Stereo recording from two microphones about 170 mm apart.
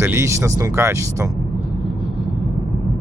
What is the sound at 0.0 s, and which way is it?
Speech, 15° right (ahead or behind).